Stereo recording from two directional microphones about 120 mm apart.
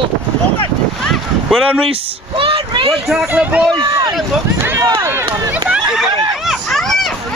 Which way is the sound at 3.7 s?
40° right (ahead or behind).